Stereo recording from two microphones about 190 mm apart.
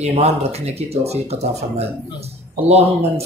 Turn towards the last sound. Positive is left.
turn(degrees=-30)  # may be behind; listen again after turning